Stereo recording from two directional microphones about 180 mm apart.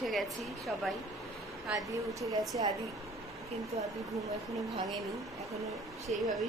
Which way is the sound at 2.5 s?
25° right (ahead or behind).